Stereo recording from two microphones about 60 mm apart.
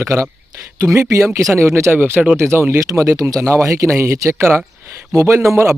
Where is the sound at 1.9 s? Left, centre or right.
Right.